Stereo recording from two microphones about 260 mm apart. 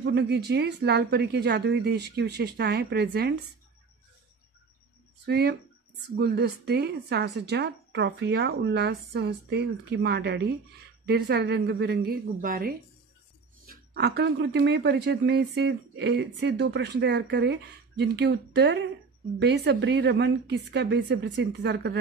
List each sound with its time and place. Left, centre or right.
0.0 s speech: right
5.2 s speech: right